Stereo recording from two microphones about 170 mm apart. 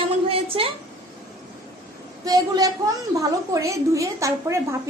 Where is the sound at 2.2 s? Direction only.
20° right (ahead or behind).